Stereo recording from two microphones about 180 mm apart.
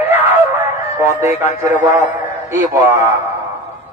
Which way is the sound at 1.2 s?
15° right (ahead or behind).